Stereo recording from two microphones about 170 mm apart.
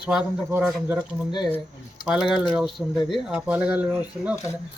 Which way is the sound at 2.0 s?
Centre (ahead or behind).